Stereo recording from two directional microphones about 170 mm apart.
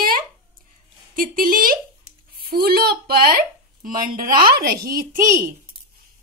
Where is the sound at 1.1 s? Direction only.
55° right (ahead or behind).